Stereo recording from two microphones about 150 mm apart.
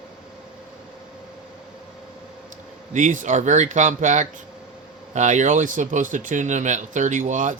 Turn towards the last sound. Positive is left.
turn(degrees=-55)  # may be behind; listen again after turning